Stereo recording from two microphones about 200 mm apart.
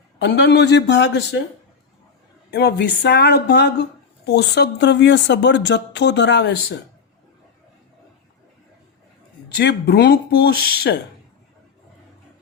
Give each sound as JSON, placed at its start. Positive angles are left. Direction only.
{"t": 0.2, "sound": "speech", "side_deg": 55}
{"t": 2.5, "sound": "speech", "side_deg": 55}
{"t": 9.6, "sound": "speech", "side_deg": 55}